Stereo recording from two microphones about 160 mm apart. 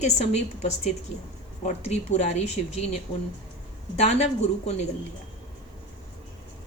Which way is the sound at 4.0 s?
45° left (ahead or behind).